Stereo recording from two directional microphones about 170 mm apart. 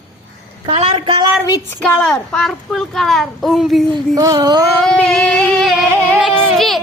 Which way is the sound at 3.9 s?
20° right (ahead or behind).